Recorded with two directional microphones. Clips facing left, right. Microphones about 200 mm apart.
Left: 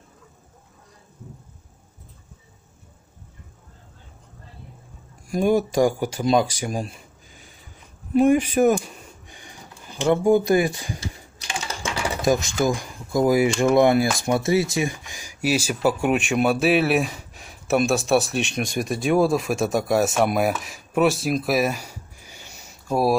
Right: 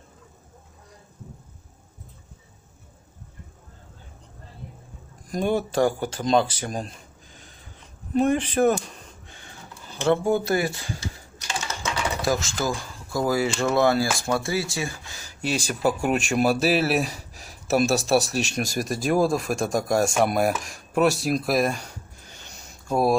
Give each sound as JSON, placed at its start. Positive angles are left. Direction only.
{"t": 5.2, "sound": "speech", "side_deg": 10}
{"t": 8.1, "sound": "a sound", "side_deg": 10}
{"t": 12.2, "sound": "speech", "side_deg": 20}